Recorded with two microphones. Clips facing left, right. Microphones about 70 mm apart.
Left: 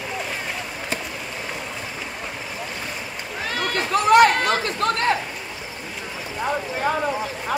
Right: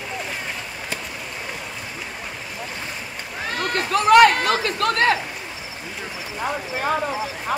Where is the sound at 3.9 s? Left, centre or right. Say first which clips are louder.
Right 1 dB; right.